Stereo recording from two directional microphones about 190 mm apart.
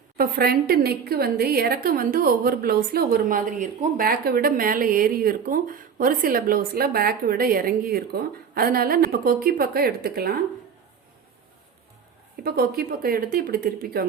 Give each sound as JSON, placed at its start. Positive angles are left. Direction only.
{"t": 0.2, "sound": "a woman's voice", "side_deg": -50}
{"t": 12.4, "sound": "a woman's voice", "side_deg": -55}